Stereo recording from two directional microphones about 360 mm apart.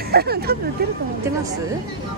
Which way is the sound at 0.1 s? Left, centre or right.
Right.